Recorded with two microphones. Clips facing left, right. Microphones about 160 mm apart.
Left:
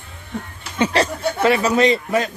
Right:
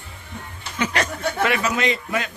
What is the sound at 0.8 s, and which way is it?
Chuckle, 30° left (ahead or behind).